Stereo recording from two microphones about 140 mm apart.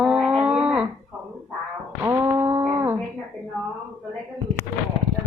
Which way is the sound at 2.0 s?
20° right (ahead or behind).